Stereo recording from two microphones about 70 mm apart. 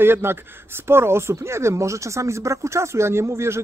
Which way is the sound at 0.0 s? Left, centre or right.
Right.